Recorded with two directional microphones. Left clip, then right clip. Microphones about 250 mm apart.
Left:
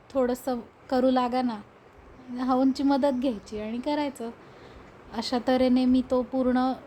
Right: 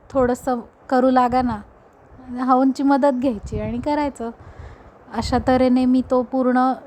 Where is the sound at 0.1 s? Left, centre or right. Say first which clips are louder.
Right 7 dB; right.